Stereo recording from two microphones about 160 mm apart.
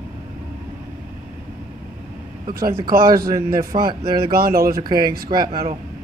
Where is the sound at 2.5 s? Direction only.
65° right (ahead or behind).